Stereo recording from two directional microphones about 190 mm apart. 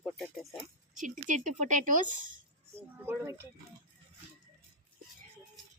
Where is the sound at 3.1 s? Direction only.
10° right (ahead or behind).